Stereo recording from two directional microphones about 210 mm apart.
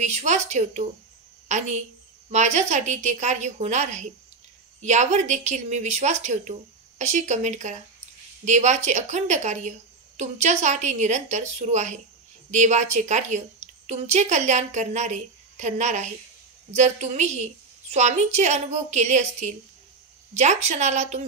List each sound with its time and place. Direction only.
0.0 s a woman's voice: 35° right (ahead or behind)
2.3 s a woman's voice: 35° right (ahead or behind)